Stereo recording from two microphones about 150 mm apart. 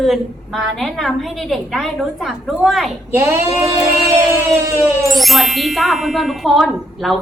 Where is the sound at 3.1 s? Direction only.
15° right (ahead or behind).